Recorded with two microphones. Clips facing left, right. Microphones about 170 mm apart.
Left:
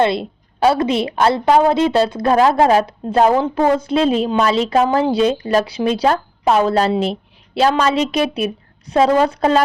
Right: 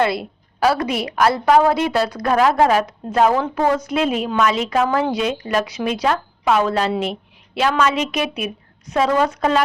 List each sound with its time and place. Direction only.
0.0 s a woman's voice: 25° left (ahead or behind)